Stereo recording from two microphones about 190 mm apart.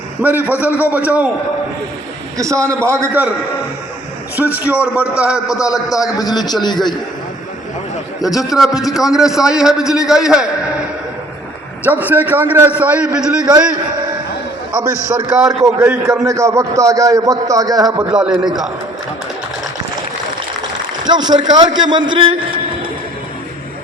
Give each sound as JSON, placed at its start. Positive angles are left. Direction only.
{"t": 0.2, "sound": "a man's voice", "side_deg": -10}
{"t": 2.4, "sound": "a man's voice", "side_deg": -15}
{"t": 4.5, "sound": "a man's voice", "side_deg": -10}
{"t": 5.5, "sound": "a man's voice", "side_deg": 20}
{"t": 8.2, "sound": "a man's voice", "side_deg": 0}
{"t": 11.9, "sound": "a man's voice", "side_deg": -10}
{"t": 15.0, "sound": "a man's voice", "side_deg": -15}
{"t": 18.1, "sound": "a man's voice", "side_deg": -5}
{"t": 21.1, "sound": "a man's voice", "side_deg": -25}